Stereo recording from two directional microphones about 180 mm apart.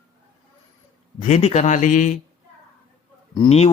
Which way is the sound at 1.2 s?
35° left (ahead or behind).